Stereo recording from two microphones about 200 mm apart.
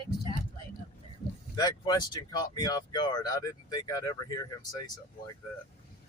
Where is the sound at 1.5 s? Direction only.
20° left (ahead or behind).